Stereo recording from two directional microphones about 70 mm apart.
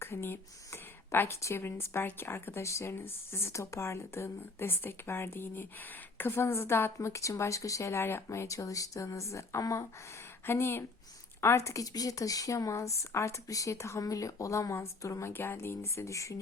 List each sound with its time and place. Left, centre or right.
0.0 s speech: left
10.4 s speech: left
15.3 s speech: left